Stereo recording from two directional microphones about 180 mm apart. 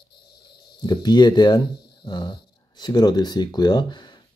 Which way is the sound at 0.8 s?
25° left (ahead or behind).